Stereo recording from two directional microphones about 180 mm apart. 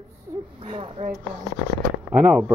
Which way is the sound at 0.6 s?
35° right (ahead or behind).